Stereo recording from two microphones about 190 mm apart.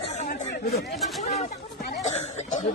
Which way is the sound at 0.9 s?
Centre (ahead or behind).